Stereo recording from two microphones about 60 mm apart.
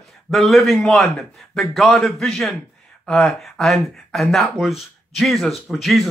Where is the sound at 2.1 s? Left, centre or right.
Centre.